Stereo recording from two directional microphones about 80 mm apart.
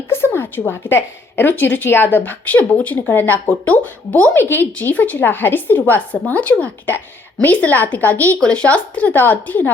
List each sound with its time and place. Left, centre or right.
0.1 s a woman's voice: left